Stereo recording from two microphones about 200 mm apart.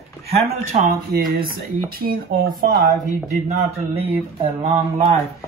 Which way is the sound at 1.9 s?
50° right (ahead or behind).